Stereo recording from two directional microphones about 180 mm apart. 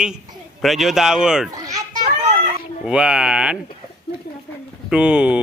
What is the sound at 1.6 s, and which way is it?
Children playing, 20° right (ahead or behind).